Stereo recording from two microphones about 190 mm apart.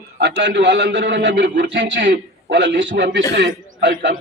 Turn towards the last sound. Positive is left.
turn(degrees=-70)  # may be behind; listen again after turning